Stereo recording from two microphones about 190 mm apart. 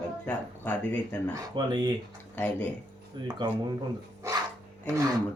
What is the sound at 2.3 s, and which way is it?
Speech, 10° left (ahead or behind).